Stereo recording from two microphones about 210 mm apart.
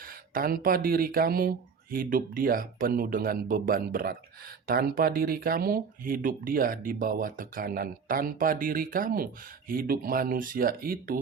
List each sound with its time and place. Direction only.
0.3 s speech: 45° right (ahead or behind)